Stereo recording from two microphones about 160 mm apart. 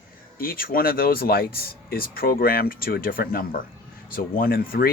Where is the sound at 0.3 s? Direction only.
65° left (ahead or behind).